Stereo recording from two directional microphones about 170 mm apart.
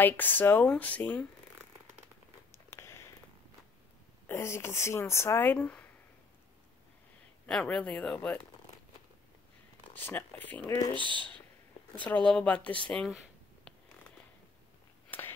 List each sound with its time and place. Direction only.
0.0 s speech: 10° left (ahead or behind)
2.5 s a sound: 15° left (ahead or behind)
4.3 s speech: 15° left (ahead or behind)
7.4 s speech: 5° left (ahead or behind)
9.9 s speech: 10° left (ahead or behind)
11.0 s speech: 30° right (ahead or behind)
12.1 s speech: 5° left (ahead or behind)
15.0 s a sound: 10° left (ahead or behind)